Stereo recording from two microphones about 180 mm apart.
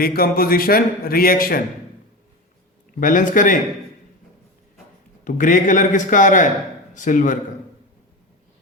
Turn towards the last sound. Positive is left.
turn(degrees=45)  # may be behind; listen again after turning